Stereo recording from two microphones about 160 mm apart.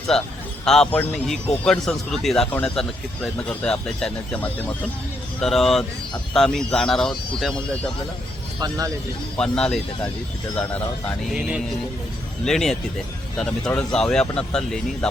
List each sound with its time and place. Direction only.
0.6 s speech: 5° left (ahead or behind)
9.4 s speech: 5° left (ahead or behind)
11.3 s speech: 5° right (ahead or behind)